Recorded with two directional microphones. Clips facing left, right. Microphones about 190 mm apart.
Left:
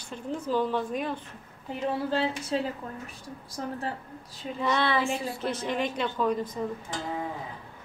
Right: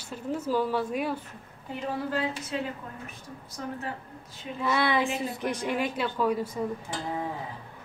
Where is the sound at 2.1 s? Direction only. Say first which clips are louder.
Left 3 dB; 30° left (ahead or behind).